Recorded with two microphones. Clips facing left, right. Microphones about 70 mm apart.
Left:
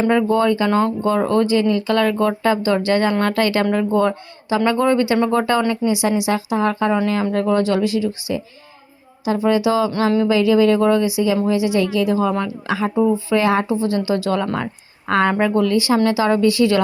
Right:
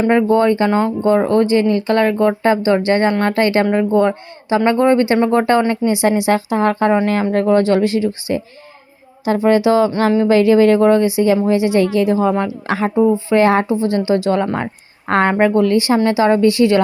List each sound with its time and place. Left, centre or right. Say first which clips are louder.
0.1 s speech: right 5 dB; right
0.7 s speech: right 1 dB; right
1.0 s speech: right 4 dB; right
12.6 s speech: right 3 dB; right